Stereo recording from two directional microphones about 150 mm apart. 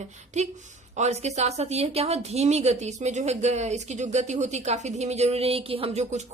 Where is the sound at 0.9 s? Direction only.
50° right (ahead or behind).